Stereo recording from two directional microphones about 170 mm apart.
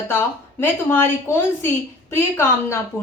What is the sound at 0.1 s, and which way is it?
A woman's voice, 15° left (ahead or behind).